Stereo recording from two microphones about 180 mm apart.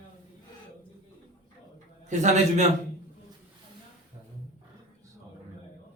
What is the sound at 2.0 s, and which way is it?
Speech, 40° right (ahead or behind).